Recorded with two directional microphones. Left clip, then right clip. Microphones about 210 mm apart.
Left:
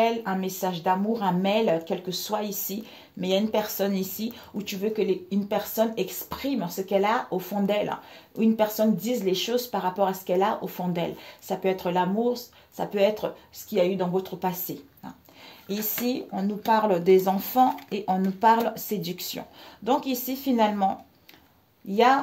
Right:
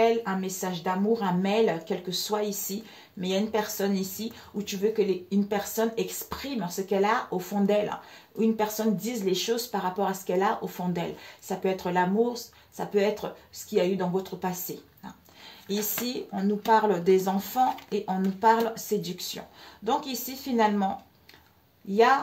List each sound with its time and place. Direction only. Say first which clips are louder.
0.0 s speech: even; 40° left (ahead or behind)
16.1 s speech: left 1 dB; 35° left (ahead or behind)